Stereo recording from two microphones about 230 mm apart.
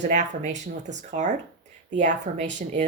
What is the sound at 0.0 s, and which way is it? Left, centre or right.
Speech, right.